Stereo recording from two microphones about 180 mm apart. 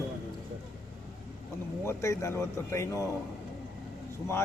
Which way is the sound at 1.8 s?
15° left (ahead or behind).